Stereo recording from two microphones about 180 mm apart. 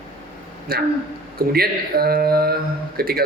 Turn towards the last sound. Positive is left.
turn(degrees=-60)  # may be behind; listen again after turning